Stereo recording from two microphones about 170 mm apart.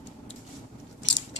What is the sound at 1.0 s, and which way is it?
Mechanisms, 90° left.